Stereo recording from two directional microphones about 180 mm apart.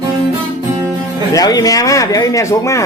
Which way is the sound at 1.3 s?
20° left (ahead or behind).